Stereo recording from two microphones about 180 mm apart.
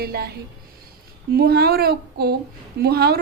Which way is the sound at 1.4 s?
60° right (ahead or behind).